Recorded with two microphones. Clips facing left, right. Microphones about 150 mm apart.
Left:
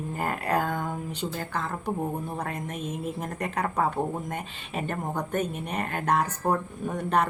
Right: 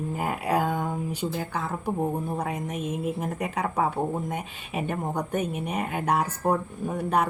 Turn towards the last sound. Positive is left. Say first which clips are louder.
# right 1 dB
turn(degrees=-10)  # may be behind; listen again after turning